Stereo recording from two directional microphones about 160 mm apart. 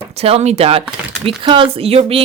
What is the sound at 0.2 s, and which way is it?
Speech, 40° right (ahead or behind).